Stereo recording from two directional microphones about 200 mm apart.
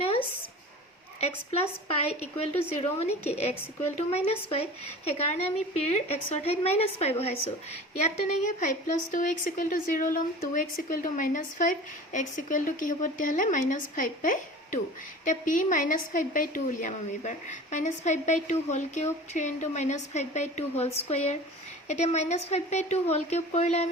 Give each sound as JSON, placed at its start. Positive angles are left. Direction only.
{"t": 2.0, "sound": "speech", "side_deg": 30}